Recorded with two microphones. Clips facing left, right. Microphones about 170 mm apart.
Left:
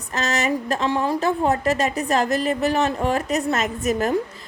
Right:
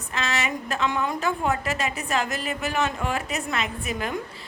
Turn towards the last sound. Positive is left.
turn(degrees=40)  # may be behind; listen again after turning